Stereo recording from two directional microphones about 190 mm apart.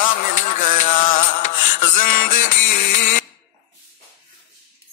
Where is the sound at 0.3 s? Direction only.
40° left (ahead or behind).